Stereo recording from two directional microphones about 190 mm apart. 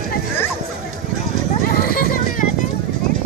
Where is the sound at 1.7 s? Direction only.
50° left (ahead or behind).